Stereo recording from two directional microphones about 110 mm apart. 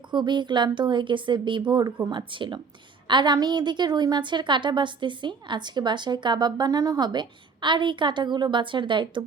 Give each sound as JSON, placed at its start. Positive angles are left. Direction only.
{"t": 0.1, "sound": "a woman's voice", "side_deg": -45}